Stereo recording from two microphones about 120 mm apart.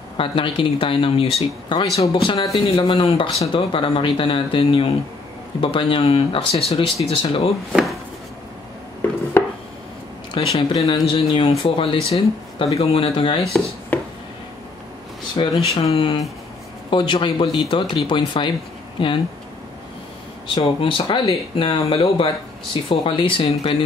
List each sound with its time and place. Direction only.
0.2 s speech: 45° left (ahead or behind)
7.7 s speech: centre (ahead or behind)
10.3 s speech: 50° left (ahead or behind)
13.9 s a sound: 15° left (ahead or behind)
15.4 s speech: 45° left (ahead or behind)
15.7 s speech: 55° left (ahead or behind)
20.4 s speech: 50° left (ahead or behind)